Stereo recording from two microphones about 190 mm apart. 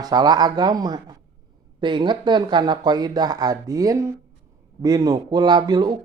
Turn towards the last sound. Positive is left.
turn(degrees=-20)  # may be behind; listen again after turning